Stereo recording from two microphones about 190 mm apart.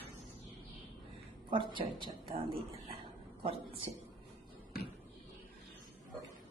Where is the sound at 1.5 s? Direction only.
25° right (ahead or behind).